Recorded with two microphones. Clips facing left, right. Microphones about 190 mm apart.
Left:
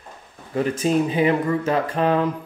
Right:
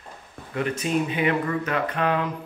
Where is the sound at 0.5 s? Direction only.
35° left (ahead or behind).